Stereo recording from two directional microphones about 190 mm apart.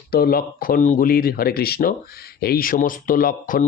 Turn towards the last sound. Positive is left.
turn(degrees=45)  # may be behind; listen again after turning